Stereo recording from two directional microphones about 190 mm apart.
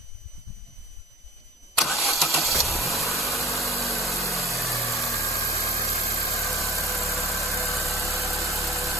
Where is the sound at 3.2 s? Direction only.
Centre (ahead or behind).